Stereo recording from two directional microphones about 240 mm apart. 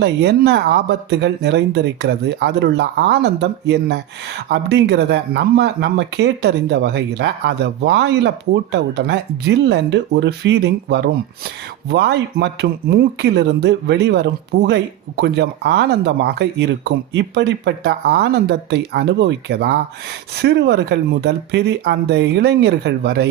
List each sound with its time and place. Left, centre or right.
0.0 s speech: right